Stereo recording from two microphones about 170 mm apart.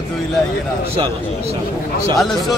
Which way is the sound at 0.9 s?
35° right (ahead or behind).